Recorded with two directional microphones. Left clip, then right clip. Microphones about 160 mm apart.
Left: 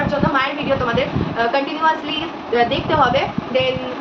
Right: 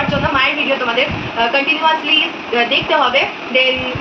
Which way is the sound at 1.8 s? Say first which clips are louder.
Right 1 dB; 20° left (ahead or behind).